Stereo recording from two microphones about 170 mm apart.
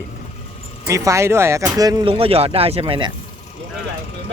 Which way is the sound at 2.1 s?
35° right (ahead or behind).